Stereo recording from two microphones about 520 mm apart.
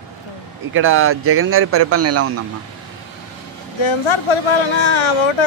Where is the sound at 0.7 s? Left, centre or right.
Right.